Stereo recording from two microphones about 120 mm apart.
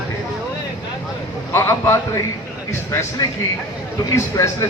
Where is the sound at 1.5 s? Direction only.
20° left (ahead or behind).